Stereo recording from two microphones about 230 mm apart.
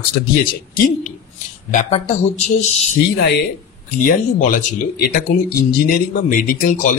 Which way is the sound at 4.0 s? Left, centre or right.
Left.